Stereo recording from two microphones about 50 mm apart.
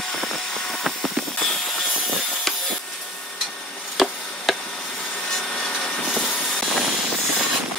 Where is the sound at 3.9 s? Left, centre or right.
Centre.